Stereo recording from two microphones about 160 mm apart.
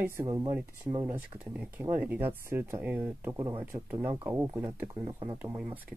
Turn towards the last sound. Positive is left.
turn(degrees=-5)  # may be behind; listen again after turning